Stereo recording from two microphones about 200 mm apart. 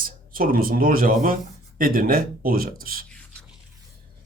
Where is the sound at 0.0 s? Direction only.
45° right (ahead or behind).